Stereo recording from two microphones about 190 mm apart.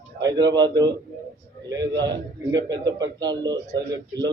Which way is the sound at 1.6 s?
20° right (ahead or behind).